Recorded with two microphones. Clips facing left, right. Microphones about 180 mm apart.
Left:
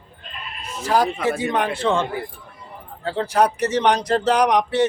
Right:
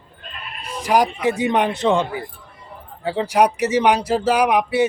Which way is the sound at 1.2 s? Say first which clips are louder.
Right 3 dB; 20° right (ahead or behind).